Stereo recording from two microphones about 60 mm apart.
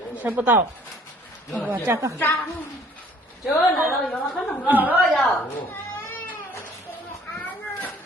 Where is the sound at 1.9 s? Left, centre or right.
Right.